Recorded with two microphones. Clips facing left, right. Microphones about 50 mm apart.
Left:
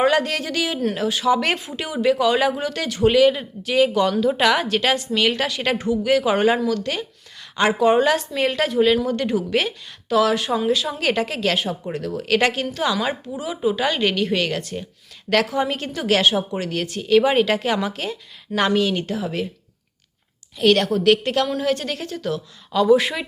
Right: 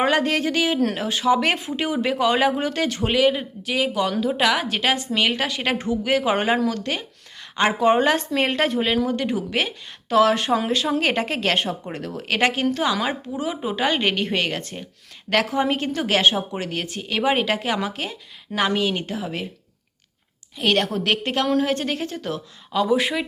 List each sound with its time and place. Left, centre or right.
0.0 s a woman's voice: right; by 4.7 s centre
4.7 s speech: centre
5.7 s a woman's voice: right
9.0 s speech: centre
10.1 s a woman's voice: right
11.9 s speech: right
20.6 s speech: centre
22.7 s speech: centre